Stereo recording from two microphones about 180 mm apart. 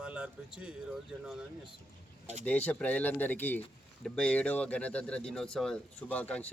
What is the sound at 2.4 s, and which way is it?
A man's voice, 10° left (ahead or behind).